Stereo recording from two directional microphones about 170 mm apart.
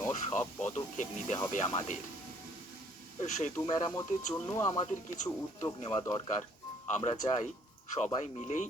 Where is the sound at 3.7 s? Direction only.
25° left (ahead or behind).